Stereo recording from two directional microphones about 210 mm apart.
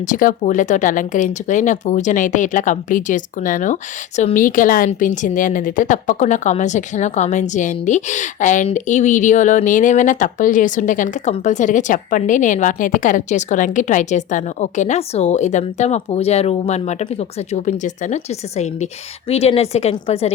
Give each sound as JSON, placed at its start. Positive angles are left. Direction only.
{"t": 0.0, "sound": "a woman's voice", "side_deg": 40}